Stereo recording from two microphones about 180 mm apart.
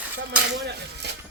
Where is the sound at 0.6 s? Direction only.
70° right (ahead or behind).